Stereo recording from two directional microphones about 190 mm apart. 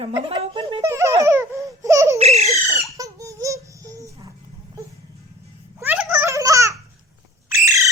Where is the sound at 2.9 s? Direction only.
15° right (ahead or behind).